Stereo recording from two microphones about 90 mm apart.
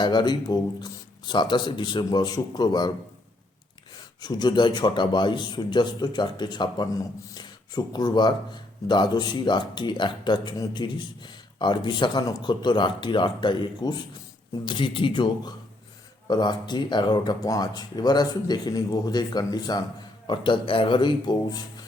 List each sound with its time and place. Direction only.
0.0 s a man's voice: 55° left (ahead or behind)
2.0 s speech: 50° left (ahead or behind)
4.2 s a man's voice: 55° left (ahead or behind)
20.2 s a man's voice: 60° left (ahead or behind)